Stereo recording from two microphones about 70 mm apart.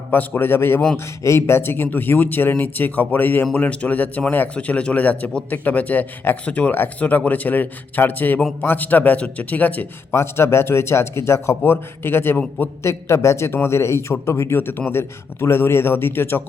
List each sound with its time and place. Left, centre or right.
0.1 s a man's voice: left
10.1 s a man's voice: left
12.8 s a man's voice: left
14.6 s a man's voice: left